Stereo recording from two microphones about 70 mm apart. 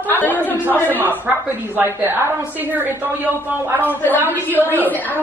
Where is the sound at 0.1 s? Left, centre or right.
Left.